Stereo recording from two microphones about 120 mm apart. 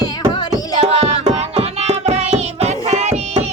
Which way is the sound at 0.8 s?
60° right (ahead or behind).